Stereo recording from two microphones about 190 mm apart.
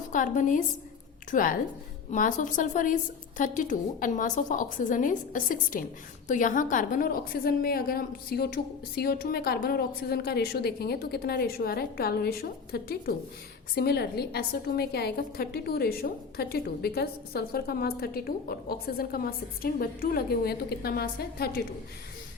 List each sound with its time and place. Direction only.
0.1 s a woman's voice: 40° left (ahead or behind)